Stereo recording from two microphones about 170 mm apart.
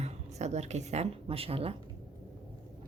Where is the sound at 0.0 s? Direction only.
40° right (ahead or behind).